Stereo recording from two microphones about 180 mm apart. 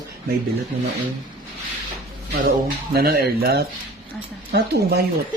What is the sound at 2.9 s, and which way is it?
Speech, 60° right (ahead or behind).